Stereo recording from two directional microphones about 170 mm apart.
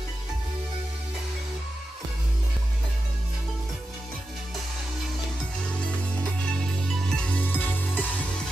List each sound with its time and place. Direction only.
6.9 s music: 5° left (ahead or behind)